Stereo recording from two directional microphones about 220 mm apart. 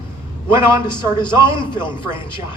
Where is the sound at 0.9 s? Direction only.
20° left (ahead or behind).